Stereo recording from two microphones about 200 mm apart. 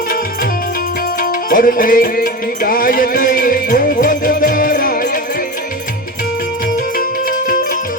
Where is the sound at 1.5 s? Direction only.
45° left (ahead or behind).